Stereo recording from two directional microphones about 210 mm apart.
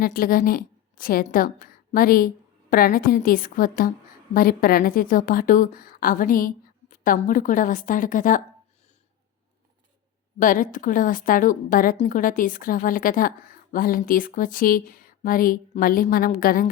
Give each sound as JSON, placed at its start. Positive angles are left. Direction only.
{"t": 0.0, "sound": "a woman's voice", "side_deg": 40}
{"t": 10.4, "sound": "a woman's voice", "side_deg": 40}